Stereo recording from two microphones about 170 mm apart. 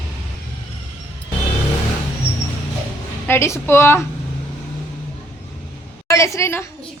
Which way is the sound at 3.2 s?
15° left (ahead or behind).